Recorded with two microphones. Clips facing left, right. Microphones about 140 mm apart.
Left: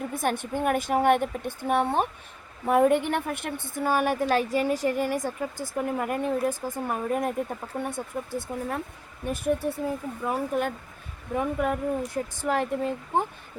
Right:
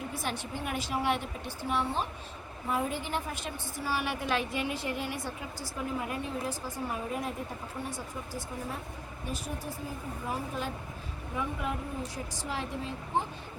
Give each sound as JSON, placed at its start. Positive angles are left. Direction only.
{"t": 0.1, "sound": "a woman's voice", "side_deg": 50}